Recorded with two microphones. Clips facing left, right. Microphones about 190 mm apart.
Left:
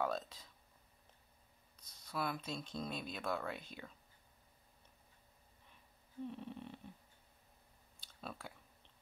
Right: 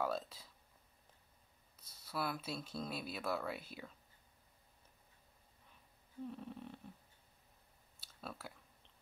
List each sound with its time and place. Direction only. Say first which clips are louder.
0.0 s speech: even; 5° right (ahead or behind)
1.8 s speech: even; 5° right (ahead or behind)
6.2 s snoring: left 1 dB; centre (ahead or behind)
8.0 s clicking: even; centre (ahead or behind)